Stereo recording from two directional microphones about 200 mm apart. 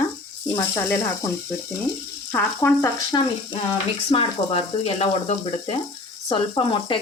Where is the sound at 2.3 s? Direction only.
10° left (ahead or behind).